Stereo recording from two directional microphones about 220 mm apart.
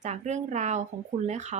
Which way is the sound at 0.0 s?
30° right (ahead or behind).